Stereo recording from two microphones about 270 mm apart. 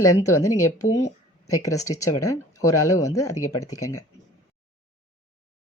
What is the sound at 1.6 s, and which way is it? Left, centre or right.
Speech, centre.